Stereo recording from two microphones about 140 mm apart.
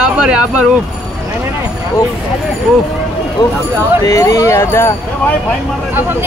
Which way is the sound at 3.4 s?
30° left (ahead or behind).